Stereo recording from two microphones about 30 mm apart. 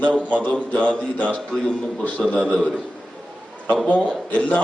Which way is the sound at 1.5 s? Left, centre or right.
Left.